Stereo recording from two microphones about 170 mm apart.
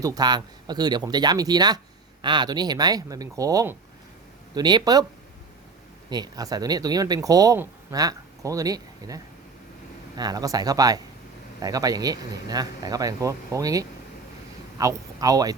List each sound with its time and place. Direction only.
0.0 s speech: 20° right (ahead or behind)
6.1 s speech: 25° right (ahead or behind)